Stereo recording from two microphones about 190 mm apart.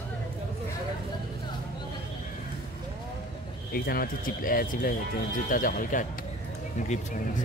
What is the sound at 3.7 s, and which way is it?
Speech, 50° left (ahead or behind).